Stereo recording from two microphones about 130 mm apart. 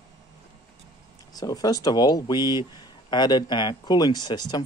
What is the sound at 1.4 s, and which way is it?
Speech, 30° left (ahead or behind).